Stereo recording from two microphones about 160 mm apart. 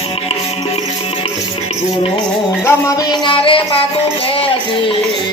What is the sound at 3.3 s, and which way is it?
Music, 35° left (ahead or behind).